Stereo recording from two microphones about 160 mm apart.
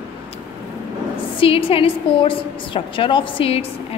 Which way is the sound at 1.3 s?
35° left (ahead or behind).